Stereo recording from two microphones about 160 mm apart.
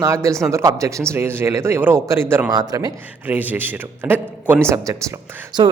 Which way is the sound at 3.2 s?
10° right (ahead or behind).